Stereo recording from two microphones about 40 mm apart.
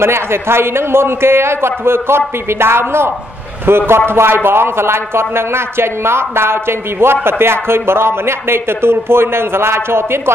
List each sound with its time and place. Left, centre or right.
0.0 s a man's voice: right
3.6 s a man's voice: right